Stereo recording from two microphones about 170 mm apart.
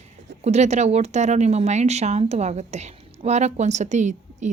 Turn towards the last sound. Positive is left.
turn(degrees=-45)  # may be behind; listen again after turning